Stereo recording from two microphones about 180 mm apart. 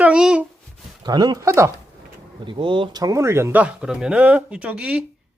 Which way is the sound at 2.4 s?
25° right (ahead or behind).